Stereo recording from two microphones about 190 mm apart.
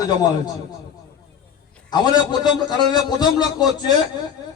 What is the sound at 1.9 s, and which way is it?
A man's voice, 25° left (ahead or behind).